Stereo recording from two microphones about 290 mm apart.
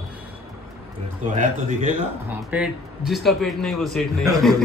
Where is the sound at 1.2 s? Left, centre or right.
Right.